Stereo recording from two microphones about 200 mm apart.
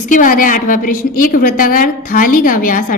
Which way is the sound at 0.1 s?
40° left (ahead or behind).